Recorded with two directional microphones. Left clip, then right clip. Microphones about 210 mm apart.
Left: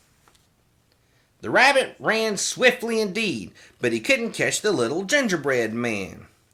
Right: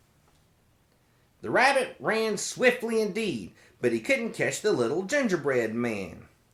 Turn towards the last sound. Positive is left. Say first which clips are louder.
# left 4 dB
turn(degrees=35)  # may be behind; listen again after turning